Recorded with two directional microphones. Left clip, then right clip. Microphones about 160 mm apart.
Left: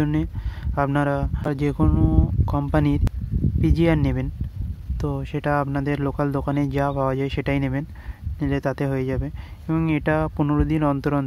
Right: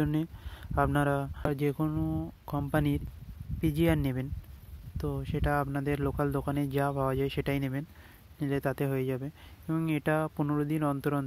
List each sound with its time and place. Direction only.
0.0 s speech: 30° right (ahead or behind)